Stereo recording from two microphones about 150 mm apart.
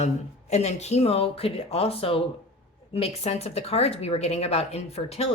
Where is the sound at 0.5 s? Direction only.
50° left (ahead or behind).